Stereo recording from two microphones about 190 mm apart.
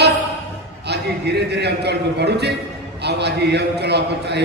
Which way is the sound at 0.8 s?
60° right (ahead or behind).